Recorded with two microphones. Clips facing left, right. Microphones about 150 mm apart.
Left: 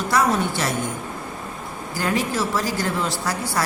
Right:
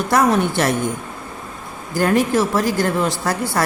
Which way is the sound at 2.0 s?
50° right (ahead or behind).